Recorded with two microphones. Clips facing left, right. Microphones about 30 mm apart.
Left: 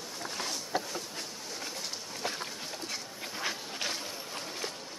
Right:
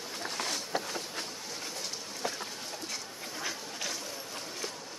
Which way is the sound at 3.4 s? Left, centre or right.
Left.